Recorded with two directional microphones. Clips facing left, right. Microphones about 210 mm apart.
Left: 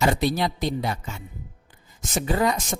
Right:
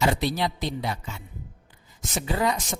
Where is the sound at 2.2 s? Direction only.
50° left (ahead or behind).